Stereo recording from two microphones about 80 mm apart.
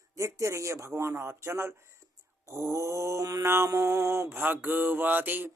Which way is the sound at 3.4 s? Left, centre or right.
Right.